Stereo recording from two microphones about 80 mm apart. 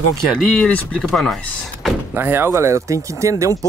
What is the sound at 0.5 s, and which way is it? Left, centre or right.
Speech, centre.